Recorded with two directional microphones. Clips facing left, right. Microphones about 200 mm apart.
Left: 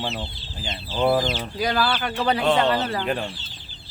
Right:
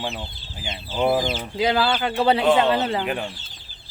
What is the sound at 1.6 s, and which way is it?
Speech, 25° right (ahead or behind).